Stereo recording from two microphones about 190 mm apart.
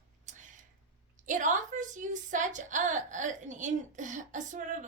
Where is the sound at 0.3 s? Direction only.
40° right (ahead or behind).